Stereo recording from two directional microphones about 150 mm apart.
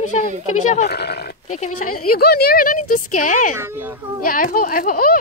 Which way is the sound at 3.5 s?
15° right (ahead or behind).